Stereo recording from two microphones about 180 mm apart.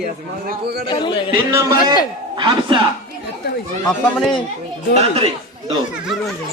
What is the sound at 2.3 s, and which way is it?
Speech, 25° right (ahead or behind).